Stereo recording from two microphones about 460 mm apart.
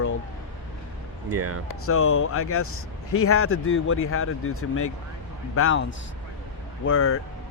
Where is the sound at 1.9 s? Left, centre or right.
Left.